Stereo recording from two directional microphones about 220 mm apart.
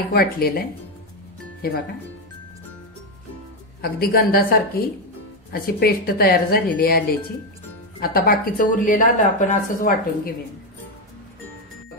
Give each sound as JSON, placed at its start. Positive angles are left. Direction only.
{"t": 0.1, "sound": "a woman's voice", "side_deg": 45}
{"t": 3.8, "sound": "a woman's voice", "side_deg": 40}